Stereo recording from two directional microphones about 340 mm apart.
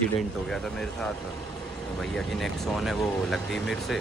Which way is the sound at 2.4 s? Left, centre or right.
Centre.